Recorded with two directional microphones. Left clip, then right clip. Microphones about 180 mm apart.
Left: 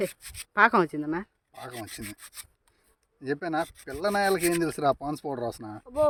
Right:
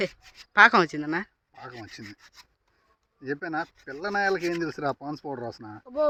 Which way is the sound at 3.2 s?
55° left (ahead or behind).